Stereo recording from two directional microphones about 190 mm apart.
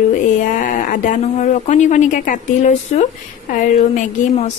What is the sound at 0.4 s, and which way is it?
A woman's voice, 45° left (ahead or behind).